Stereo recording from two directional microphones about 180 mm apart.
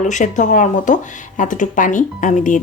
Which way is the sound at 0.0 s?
45° left (ahead or behind).